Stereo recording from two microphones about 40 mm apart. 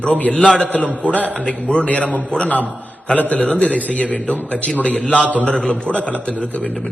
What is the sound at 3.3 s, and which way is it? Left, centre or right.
A man's voice, left.